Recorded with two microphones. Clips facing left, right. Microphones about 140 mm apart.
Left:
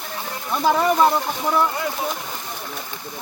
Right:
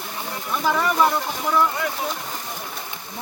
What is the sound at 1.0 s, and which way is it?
Speech, 20° left (ahead or behind).